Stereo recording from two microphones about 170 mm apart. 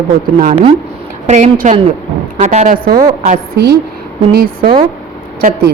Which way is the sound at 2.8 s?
55° right (ahead or behind).